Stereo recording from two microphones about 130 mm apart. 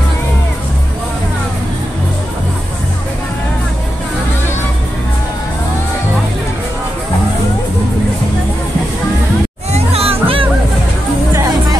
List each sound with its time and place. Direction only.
9.7 s music: 50° right (ahead or behind)
11.3 s music: 25° right (ahead or behind)